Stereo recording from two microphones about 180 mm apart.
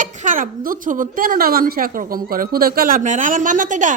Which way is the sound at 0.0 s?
45° right (ahead or behind).